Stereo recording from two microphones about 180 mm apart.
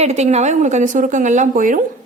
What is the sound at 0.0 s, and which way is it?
A woman's voice, 40° right (ahead or behind).